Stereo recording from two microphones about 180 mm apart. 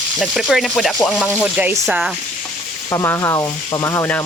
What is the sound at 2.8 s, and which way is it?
Speech, 15° left (ahead or behind).